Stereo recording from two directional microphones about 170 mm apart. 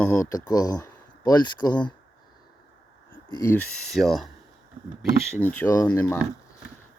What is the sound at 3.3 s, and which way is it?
Speech, 15° left (ahead or behind).